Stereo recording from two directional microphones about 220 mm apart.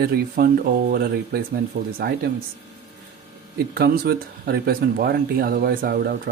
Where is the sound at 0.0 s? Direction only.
45° right (ahead or behind).